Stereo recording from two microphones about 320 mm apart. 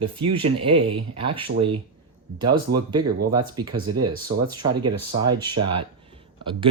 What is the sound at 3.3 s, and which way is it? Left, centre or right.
Speech, centre.